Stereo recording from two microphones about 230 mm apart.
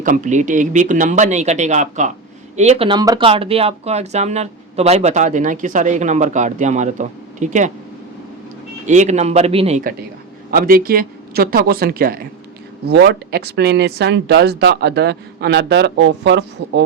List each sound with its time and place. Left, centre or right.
0.0 s speech: right
8.9 s a man's voice: right